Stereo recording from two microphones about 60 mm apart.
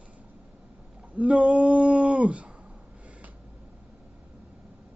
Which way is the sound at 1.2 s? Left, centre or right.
Centre.